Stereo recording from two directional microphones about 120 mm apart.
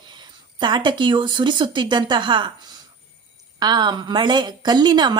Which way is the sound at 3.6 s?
35° right (ahead or behind).